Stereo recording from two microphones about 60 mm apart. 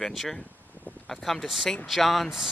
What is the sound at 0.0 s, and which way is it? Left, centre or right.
Speech, centre.